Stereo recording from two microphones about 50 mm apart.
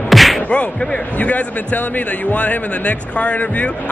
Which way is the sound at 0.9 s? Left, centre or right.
Left.